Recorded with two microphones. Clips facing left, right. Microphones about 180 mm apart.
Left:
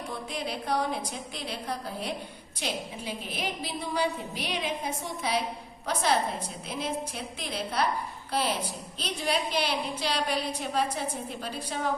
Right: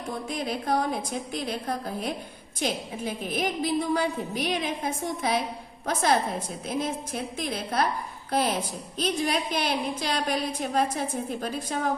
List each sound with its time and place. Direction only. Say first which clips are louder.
0.3 s a woman's voice: right 4 dB; 45° right (ahead or behind)